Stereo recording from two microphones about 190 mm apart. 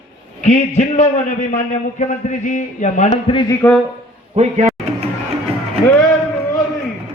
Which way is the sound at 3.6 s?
15° left (ahead or behind).